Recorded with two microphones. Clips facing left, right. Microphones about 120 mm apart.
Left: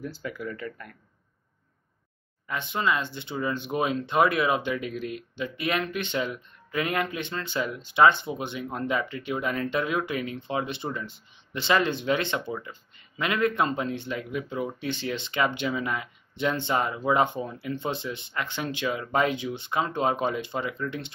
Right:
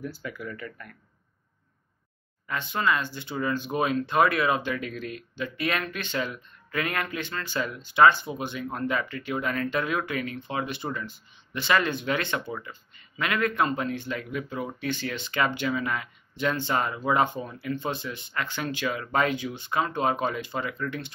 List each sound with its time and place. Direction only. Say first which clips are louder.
0.0 s speech: left 1 dB; 25° left (ahead or behind)
2.4 s speech: even; 20° left (ahead or behind)